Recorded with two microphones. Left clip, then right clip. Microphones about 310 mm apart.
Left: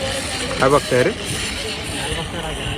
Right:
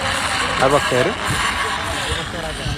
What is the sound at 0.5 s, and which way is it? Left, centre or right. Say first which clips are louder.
Speech: left 1 dB; centre.